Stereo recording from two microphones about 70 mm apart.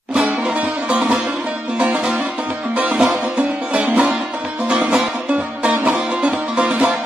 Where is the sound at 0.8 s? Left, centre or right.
Centre.